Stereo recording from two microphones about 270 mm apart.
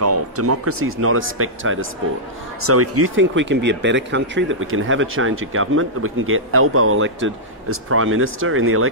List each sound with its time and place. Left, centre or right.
0.0 s speech: right